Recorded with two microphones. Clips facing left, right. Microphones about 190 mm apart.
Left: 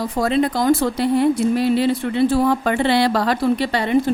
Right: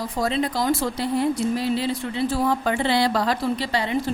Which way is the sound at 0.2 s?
55° left (ahead or behind).